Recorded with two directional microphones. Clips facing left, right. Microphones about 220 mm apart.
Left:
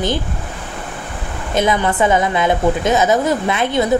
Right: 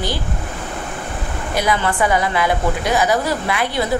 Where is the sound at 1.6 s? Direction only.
20° left (ahead or behind).